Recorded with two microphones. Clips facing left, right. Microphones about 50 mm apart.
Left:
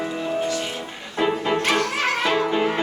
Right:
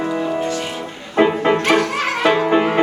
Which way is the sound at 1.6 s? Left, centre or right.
Centre.